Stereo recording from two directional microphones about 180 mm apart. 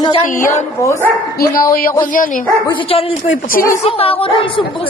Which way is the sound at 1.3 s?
55° left (ahead or behind).